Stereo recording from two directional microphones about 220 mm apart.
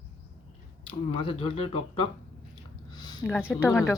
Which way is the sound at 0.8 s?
25° left (ahead or behind).